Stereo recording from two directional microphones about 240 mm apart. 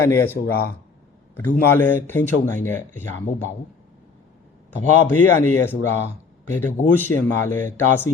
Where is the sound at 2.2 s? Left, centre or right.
Right.